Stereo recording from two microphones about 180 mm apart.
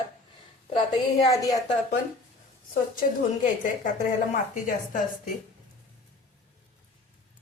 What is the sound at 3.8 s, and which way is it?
A woman's voice, 45° left (ahead or behind).